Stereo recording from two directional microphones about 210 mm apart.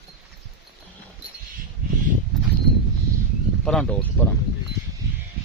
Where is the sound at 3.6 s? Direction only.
5° left (ahead or behind).